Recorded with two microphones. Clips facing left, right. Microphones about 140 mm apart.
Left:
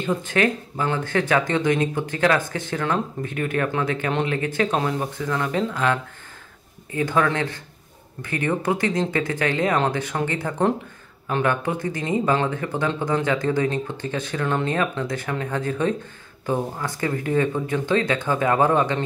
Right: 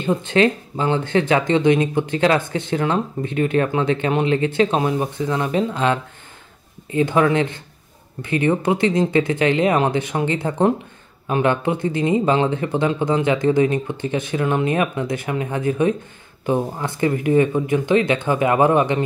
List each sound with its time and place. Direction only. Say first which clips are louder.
0.0 s speech: right 4 dB; 25° right (ahead or behind)